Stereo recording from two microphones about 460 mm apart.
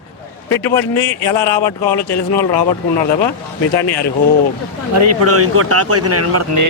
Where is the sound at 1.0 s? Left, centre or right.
Left.